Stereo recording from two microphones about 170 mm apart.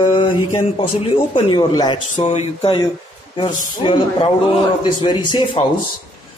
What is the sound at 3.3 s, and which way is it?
Speech, 30° left (ahead or behind).